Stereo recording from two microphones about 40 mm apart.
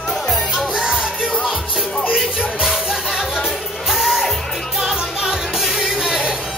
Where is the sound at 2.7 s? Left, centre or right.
Centre.